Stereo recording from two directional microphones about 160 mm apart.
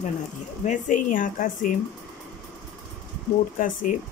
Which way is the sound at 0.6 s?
50° left (ahead or behind).